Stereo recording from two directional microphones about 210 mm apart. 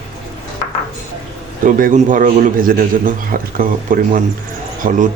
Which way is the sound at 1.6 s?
40° right (ahead or behind).